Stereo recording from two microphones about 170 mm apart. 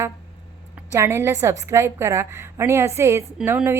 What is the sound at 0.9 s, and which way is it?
A woman's voice, 15° right (ahead or behind).